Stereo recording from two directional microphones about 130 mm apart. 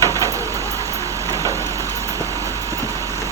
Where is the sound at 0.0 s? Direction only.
25° left (ahead or behind).